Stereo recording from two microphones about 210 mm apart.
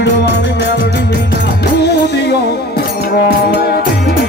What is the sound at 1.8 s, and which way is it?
Music, 50° left (ahead or behind).